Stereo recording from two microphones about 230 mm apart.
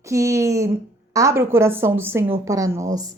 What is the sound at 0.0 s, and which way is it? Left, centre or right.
A woman's voice, centre.